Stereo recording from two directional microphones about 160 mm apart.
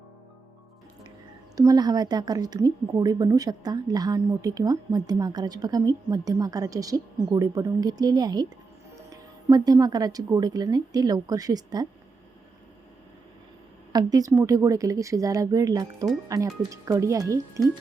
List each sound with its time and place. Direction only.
1.5 s a woman's voice: 25° right (ahead or behind)
13.9 s a woman's voice: 25° right (ahead or behind)